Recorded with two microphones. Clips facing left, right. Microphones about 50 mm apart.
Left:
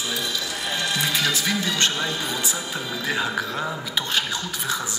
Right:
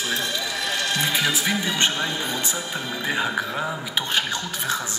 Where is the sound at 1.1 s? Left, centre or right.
Centre.